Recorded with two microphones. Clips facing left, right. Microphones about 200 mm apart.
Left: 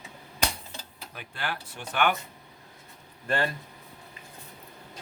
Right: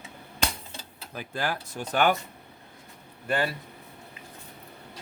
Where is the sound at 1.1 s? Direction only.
40° right (ahead or behind).